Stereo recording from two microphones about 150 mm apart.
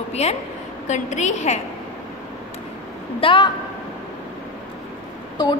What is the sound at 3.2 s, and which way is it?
Speech, 35° left (ahead or behind).